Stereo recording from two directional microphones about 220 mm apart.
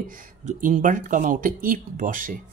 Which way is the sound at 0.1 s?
35° right (ahead or behind).